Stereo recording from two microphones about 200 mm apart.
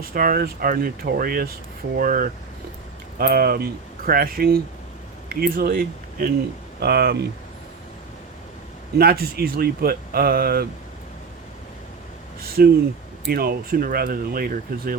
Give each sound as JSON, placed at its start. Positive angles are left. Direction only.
{"t": 0.0, "sound": "speech", "side_deg": -45}
{"t": 9.0, "sound": "speech", "side_deg": -50}
{"t": 12.6, "sound": "speech", "side_deg": -50}